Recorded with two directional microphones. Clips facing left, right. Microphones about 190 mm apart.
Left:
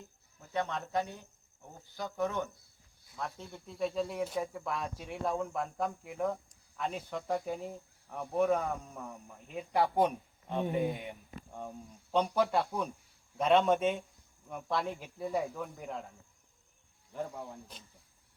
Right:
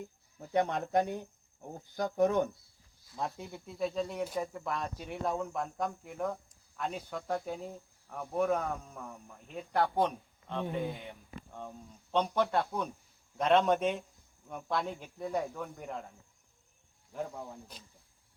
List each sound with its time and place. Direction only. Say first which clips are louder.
0.7 s speech: right 5 dB; 50° right (ahead or behind)
3.3 s speech: right 1 dB; 10° right (ahead or behind)